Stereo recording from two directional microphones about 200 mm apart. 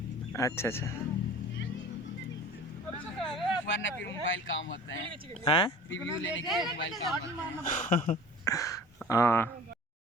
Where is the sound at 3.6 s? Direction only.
65° left (ahead or behind).